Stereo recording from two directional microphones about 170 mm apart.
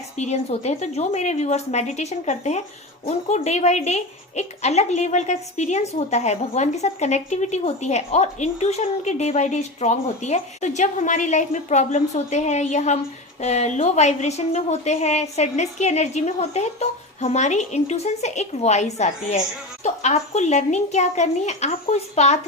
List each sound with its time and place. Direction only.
0.2 s a woman's voice: 40° left (ahead or behind)